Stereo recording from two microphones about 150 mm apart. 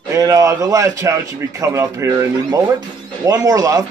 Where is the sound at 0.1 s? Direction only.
25° right (ahead or behind).